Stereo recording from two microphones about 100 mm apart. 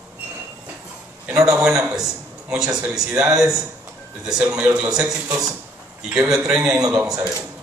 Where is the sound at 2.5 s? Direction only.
5° right (ahead or behind).